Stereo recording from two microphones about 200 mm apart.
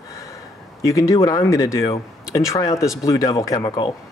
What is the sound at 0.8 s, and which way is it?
Speech, 15° left (ahead or behind).